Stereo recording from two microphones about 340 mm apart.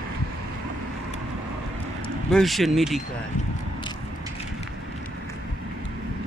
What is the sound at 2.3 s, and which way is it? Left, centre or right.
Speech, centre.